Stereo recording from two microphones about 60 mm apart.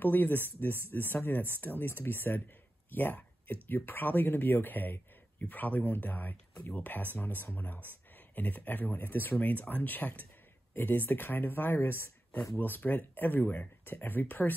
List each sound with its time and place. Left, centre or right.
0.0 s speech: left
2.9 s a sound: left
3.6 s speech: left